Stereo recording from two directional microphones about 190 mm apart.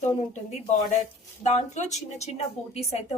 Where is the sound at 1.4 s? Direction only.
35° left (ahead or behind).